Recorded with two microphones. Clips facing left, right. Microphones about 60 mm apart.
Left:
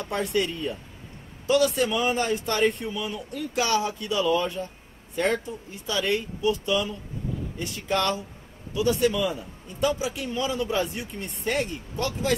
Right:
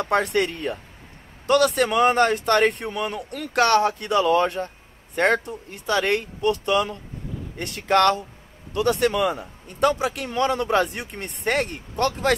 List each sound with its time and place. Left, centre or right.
0.0 s a man's voice: right